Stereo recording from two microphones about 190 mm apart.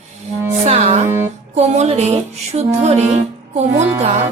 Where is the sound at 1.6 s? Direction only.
35° right (ahead or behind).